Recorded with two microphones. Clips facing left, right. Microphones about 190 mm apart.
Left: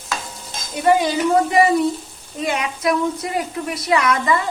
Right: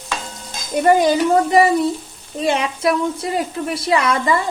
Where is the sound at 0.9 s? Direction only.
50° right (ahead or behind).